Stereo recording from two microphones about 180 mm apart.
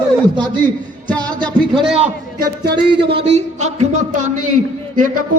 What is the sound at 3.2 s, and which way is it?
Speech, 40° right (ahead or behind).